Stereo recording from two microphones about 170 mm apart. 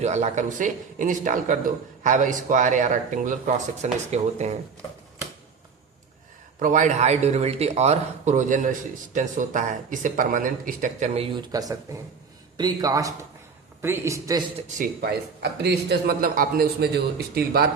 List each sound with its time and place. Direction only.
0.0 s speech: 40° right (ahead or behind)
6.6 s speech: 50° right (ahead or behind)
11.3 s a man's voice: 20° right (ahead or behind)
14.8 s a man's voice: 70° right (ahead or behind)